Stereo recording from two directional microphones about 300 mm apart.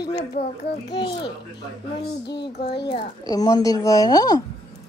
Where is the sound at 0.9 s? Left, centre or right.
Centre.